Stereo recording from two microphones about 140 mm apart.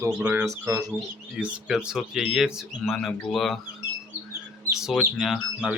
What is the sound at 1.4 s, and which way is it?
Speech, 5° right (ahead or behind).